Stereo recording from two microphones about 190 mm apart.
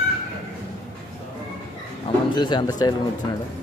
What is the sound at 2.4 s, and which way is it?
Speech, 25° left (ahead or behind).